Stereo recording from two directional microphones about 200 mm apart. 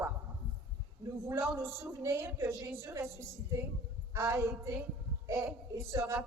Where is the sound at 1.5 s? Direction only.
10° right (ahead or behind).